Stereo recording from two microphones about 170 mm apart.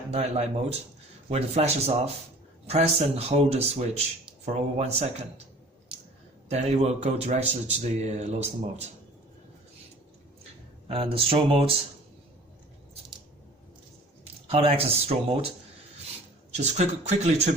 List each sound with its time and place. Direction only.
0.1 s a man's voice: 40° right (ahead or behind)
6.5 s a man's voice: 40° right (ahead or behind)
10.8 s a man's voice: 35° right (ahead or behind)
14.4 s a man's voice: 35° right (ahead or behind)
16.5 s a man's voice: 40° right (ahead or behind)